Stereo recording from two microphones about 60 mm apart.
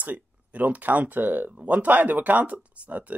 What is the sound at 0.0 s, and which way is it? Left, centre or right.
Speech, right.